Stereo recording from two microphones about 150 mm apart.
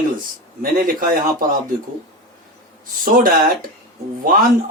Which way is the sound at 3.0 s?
70° right (ahead or behind).